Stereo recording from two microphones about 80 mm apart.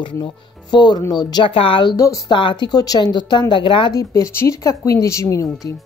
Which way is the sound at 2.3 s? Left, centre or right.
Left.